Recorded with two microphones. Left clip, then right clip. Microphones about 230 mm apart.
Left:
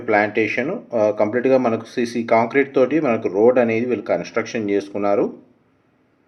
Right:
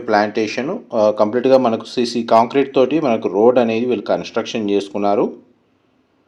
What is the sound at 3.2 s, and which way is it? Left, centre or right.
Speech, right.